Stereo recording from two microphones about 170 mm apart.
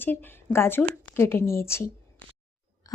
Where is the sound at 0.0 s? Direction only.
10° left (ahead or behind).